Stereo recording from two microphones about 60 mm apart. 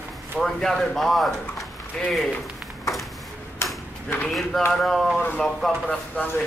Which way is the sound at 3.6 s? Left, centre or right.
Left.